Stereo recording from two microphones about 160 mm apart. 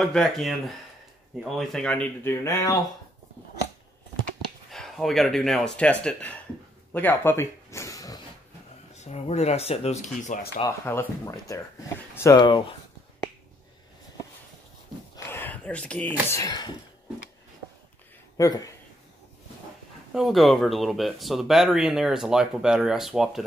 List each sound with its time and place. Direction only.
0.0 s speech: 5° left (ahead or behind)
2.4 s speech: 20° left (ahead or behind)
4.6 s speech: centre (ahead or behind)
6.9 s a sound: 10° left (ahead or behind)
8.9 s speech: 45° left (ahead or behind)
10.6 s speech: 15° left (ahead or behind)
15.2 s speech: 10° left (ahead or behind)
18.4 s speech: 20° left (ahead or behind)
20.2 s speech: centre (ahead or behind)